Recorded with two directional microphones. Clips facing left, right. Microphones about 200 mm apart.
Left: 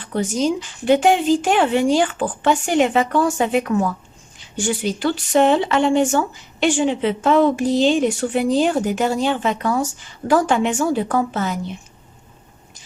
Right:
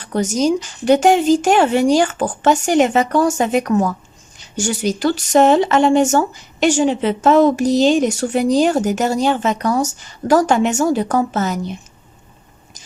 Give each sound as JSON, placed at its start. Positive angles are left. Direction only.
{"t": 0.0, "sound": "speech", "side_deg": -45}